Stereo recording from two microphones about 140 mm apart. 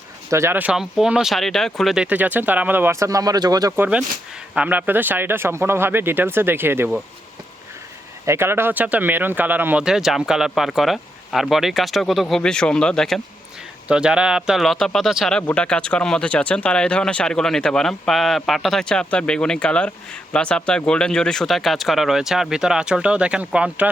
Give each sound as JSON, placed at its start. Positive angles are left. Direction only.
{"t": 0.3, "sound": "speech", "side_deg": -20}
{"t": 2.0, "sound": "speech", "side_deg": -10}
{"t": 3.8, "sound": "speech", "side_deg": -10}
{"t": 8.2, "sound": "speech", "side_deg": -20}